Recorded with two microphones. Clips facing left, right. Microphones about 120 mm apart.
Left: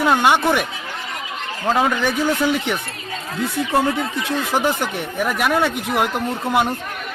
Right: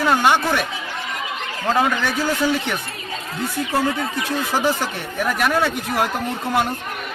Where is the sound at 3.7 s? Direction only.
25° left (ahead or behind).